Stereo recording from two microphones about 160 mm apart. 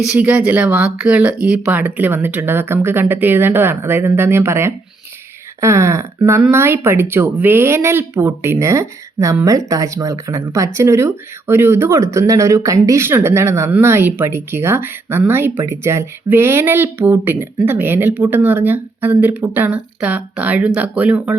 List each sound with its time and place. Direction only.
0.0 s speech: 5° right (ahead or behind)